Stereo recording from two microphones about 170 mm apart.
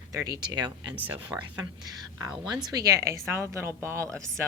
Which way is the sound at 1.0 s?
10° right (ahead or behind).